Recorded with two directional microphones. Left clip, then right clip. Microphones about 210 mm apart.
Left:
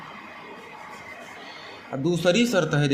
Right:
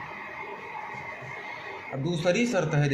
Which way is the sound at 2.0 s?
70° left (ahead or behind).